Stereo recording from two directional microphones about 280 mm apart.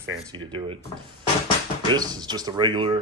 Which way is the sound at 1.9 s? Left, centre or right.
Centre.